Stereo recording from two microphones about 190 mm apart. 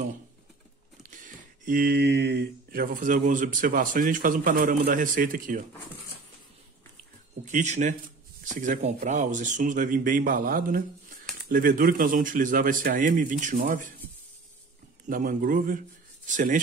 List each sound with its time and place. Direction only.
1.0 s speech: 45° right (ahead or behind)
7.4 s speech: 40° right (ahead or behind)
15.0 s speech: 45° right (ahead or behind)